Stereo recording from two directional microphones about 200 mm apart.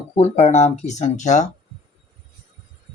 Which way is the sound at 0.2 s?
35° left (ahead or behind).